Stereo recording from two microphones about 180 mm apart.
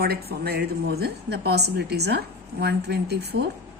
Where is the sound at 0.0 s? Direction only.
60° right (ahead or behind).